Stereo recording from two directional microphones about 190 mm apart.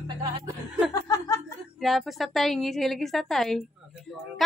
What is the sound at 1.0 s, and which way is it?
Chuckle, 20° left (ahead or behind).